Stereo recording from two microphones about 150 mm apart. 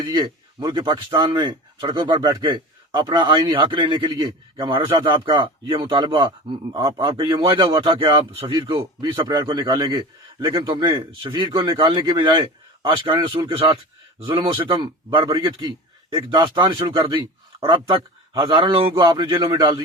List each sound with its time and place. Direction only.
0.0 s a man's voice: 30° right (ahead or behind)